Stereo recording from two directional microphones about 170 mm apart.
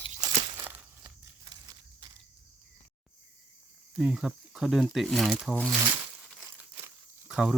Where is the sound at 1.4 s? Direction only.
25° right (ahead or behind).